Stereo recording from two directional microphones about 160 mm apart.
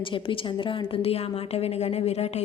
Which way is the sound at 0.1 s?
30° left (ahead or behind).